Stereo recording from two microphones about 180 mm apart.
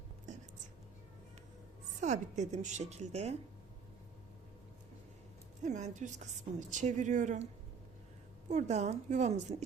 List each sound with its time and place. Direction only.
2.0 s speech: 40° right (ahead or behind)
5.6 s a woman's voice: 40° right (ahead or behind)
8.4 s speech: 40° right (ahead or behind)